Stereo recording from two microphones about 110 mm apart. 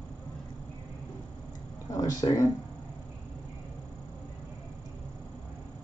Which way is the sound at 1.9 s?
35° left (ahead or behind).